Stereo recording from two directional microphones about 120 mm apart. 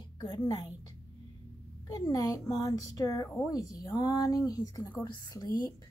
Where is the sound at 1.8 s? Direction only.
30° left (ahead or behind).